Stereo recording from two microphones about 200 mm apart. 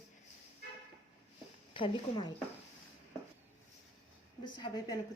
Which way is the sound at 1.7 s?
25° left (ahead or behind).